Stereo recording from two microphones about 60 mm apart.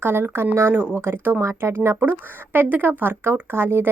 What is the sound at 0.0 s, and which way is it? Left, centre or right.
A woman's voice, right.